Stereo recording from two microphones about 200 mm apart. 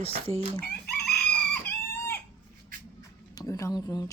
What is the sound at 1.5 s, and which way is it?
Chicken, 10° left (ahead or behind).